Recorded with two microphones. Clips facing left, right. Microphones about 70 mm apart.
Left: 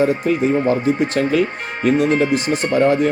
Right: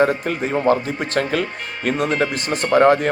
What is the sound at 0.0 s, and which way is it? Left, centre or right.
Speech, right.